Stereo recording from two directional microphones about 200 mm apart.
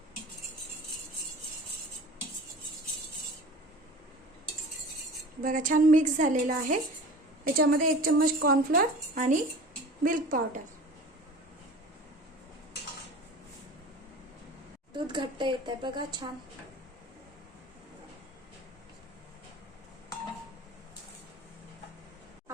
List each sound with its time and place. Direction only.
5.4 s a woman's voice: 40° right (ahead or behind)
14.9 s a woman's voice: 20° right (ahead or behind)